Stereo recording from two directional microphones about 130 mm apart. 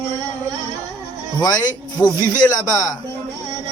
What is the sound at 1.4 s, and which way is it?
Speech, 30° left (ahead or behind).